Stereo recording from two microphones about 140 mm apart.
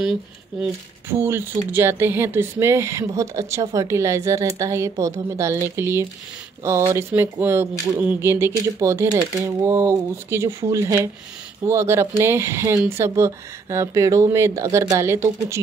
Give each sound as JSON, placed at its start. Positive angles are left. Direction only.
{"t": 0.0, "sound": "speech", "side_deg": -5}
{"t": 1.2, "sound": "speech", "side_deg": -15}